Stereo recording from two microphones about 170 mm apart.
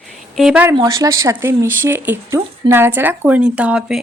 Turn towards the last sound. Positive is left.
turn(degrees=-5)  # may be behind; listen again after turning